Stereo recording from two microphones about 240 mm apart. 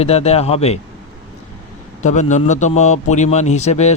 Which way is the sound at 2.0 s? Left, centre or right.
Left.